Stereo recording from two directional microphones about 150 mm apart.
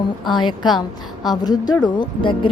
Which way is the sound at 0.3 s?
30° left (ahead or behind).